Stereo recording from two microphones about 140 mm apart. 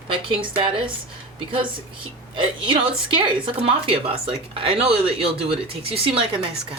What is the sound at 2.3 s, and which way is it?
A woman's voice, 35° right (ahead or behind).